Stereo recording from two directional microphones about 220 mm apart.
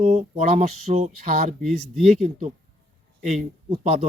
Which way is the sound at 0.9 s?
30° right (ahead or behind).